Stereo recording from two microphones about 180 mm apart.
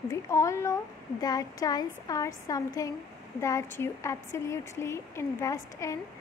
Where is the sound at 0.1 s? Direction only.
15° left (ahead or behind).